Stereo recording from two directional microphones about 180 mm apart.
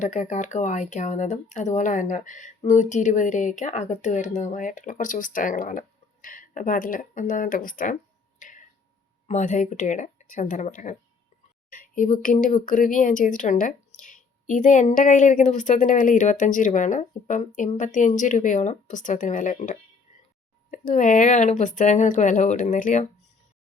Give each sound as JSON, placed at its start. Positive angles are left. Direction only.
{"t": 0.0, "sound": "a woman's voice", "side_deg": 40}
{"t": 8.4, "sound": "tick-tock", "side_deg": 45}
{"t": 9.2, "sound": "a woman's voice", "side_deg": 40}